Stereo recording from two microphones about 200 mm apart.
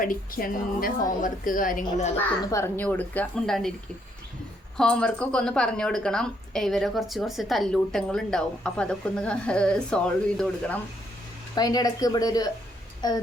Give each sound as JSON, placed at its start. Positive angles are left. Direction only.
{"t": 0.0, "sound": "a woman's voice", "side_deg": 45}
{"t": 2.1, "sound": "a woman's voice", "side_deg": 10}
{"t": 4.8, "sound": "a woman's voice", "side_deg": 5}
{"t": 11.5, "sound": "speech", "side_deg": 20}